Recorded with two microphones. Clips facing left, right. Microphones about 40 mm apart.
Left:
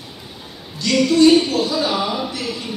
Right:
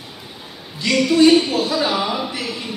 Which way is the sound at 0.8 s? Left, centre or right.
Centre.